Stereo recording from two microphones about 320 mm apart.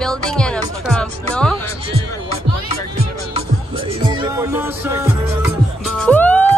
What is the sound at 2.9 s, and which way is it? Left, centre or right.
Music, centre.